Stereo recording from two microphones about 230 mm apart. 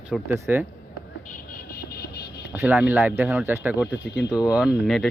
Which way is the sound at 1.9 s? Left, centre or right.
Left.